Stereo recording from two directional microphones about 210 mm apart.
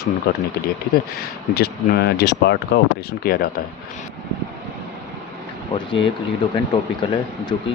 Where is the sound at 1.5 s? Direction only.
50° left (ahead or behind).